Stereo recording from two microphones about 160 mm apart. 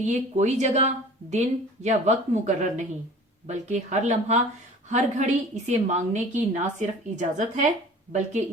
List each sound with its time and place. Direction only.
0.0 s a woman's voice: 45° right (ahead or behind)